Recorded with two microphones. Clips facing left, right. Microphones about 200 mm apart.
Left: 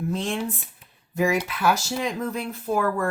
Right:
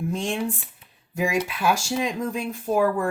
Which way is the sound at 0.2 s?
15° right (ahead or behind).